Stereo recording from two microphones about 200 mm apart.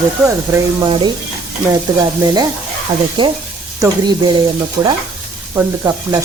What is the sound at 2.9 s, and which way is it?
Speech, 25° right (ahead or behind).